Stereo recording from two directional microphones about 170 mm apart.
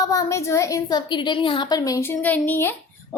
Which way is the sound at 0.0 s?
20° left (ahead or behind).